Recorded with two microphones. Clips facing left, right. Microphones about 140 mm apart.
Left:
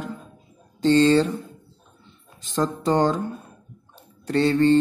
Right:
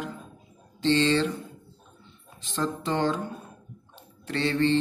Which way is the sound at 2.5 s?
40° left (ahead or behind).